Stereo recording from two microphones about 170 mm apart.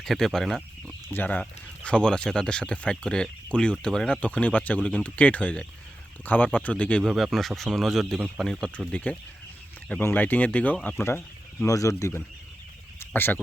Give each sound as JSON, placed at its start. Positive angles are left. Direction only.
{"t": 0.0, "sound": "speech", "side_deg": 0}
{"t": 11.6, "sound": "speech", "side_deg": 20}
{"t": 13.0, "sound": "frog", "side_deg": 10}